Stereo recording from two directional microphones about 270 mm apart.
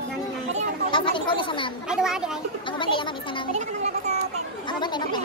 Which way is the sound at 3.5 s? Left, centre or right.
Right.